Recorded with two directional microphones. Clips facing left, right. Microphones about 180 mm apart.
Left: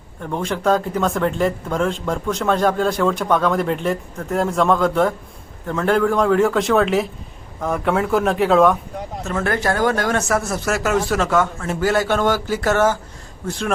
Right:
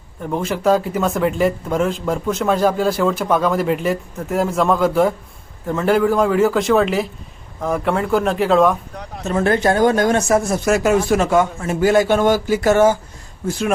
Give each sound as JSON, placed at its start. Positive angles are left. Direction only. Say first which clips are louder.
{"t": 0.2, "sound": "speech", "louder": "right 2 dB", "side_deg": -5}
{"t": 9.2, "sound": "speech", "louder": "right 5 dB", "side_deg": -20}